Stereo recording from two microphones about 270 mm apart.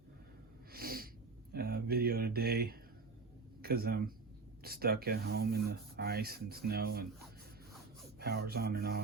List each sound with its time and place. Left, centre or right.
0.7 s snort: right
1.5 s mantra: right
3.6 s speech: right
8.2 s speech: right